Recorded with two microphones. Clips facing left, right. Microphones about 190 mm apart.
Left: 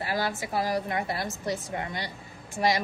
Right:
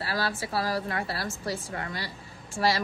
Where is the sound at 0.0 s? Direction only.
20° left (ahead or behind).